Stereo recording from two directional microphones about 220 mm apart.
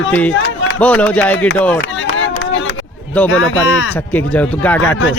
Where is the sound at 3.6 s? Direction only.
60° left (ahead or behind).